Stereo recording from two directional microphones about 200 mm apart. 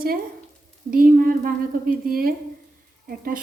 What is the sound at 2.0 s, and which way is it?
Speech, 45° right (ahead or behind).